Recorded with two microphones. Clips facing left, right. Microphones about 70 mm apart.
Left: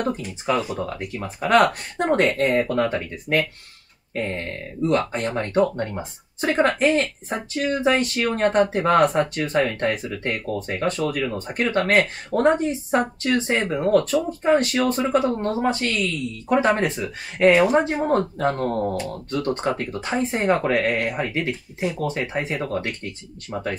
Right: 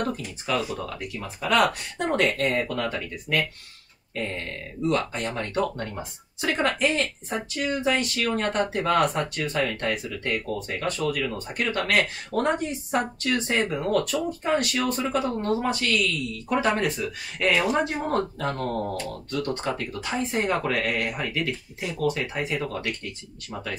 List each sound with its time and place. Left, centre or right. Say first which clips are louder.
0.0 s speech: left 4 dB; left
1.2 s speech: left 5 dB; left